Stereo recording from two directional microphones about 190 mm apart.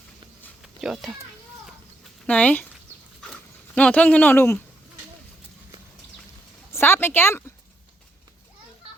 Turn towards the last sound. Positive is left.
turn(degrees=10)  # may be behind; listen again after turning